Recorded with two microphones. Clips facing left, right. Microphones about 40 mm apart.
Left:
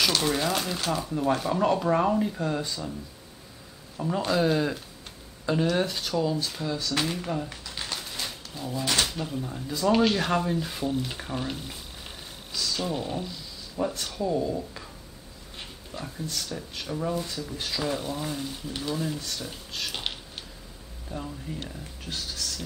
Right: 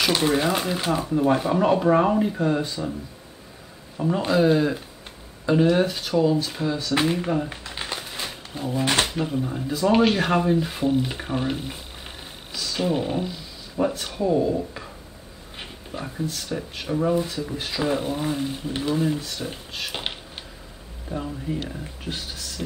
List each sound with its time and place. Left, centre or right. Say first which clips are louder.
0.0 s speech: right 4 dB; centre
4.0 s speech: right 5 dB; centre
8.7 s speech: right 5 dB; right
9.0 s speech: right 5 dB; right